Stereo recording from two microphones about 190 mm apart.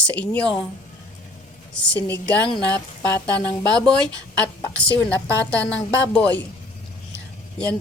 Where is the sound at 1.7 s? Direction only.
5° left (ahead or behind).